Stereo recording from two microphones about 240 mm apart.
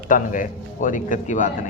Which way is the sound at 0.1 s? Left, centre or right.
Left.